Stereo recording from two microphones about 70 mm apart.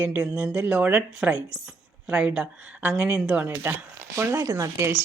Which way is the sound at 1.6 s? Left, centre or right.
Centre.